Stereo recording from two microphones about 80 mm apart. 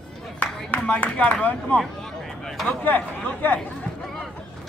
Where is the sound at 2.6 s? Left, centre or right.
Left.